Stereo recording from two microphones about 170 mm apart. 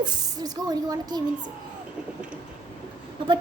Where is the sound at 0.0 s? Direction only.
25° right (ahead or behind).